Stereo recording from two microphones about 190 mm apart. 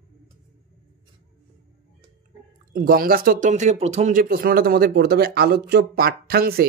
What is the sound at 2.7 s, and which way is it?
Speech, 50° right (ahead or behind).